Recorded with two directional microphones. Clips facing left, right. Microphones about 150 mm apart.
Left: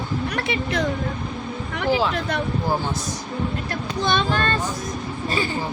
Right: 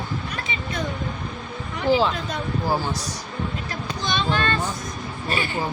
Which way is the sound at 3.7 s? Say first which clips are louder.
Left 4 dB; 55° left (ahead or behind).